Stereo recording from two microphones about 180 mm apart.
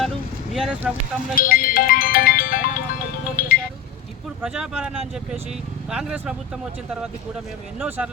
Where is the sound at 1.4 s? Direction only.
50° left (ahead or behind).